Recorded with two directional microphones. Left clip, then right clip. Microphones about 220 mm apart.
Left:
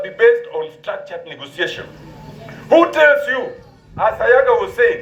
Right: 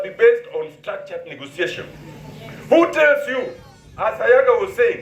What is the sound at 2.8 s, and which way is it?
A man's voice, 35° right (ahead or behind).